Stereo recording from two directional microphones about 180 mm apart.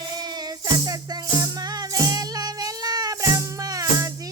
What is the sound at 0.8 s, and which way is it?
Music, 20° right (ahead or behind).